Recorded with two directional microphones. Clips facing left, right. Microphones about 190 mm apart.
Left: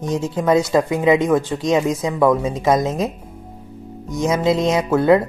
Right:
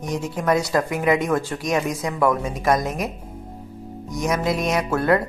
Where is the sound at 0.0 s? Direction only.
25° left (ahead or behind).